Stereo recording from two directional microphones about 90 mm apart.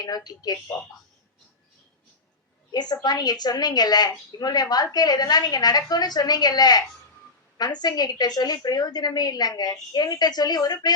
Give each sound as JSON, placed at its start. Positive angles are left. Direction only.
{"t": 0.3, "sound": "a woman's voice", "side_deg": 50}
{"t": 2.7, "sound": "a woman's voice", "side_deg": 50}